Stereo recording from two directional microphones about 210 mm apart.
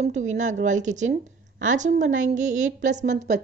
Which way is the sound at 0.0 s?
35° right (ahead or behind).